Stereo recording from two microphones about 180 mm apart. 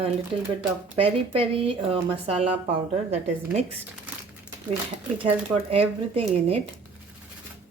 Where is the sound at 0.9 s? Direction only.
30° right (ahead or behind).